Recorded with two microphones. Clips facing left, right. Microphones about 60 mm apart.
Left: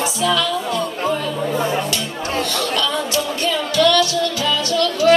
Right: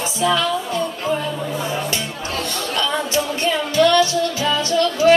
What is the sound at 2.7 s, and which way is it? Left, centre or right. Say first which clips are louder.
Music: right 3 dB; right.